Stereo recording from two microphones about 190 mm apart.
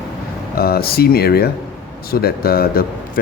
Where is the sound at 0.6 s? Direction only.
55° left (ahead or behind).